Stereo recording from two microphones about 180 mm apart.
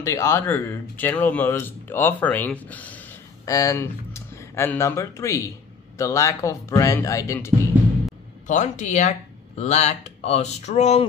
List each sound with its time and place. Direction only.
0.0 s speech: 15° left (ahead or behind)
8.5 s speech: 40° left (ahead or behind)